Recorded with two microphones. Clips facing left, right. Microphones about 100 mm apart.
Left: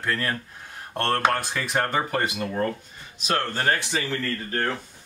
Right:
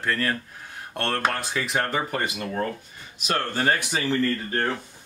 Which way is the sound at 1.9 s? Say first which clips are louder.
Left 2 dB; centre (ahead or behind).